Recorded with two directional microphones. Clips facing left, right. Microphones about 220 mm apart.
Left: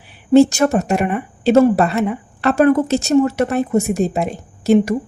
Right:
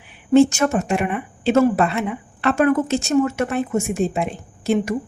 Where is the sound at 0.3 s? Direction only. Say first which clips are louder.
Left 3 dB; 35° left (ahead or behind).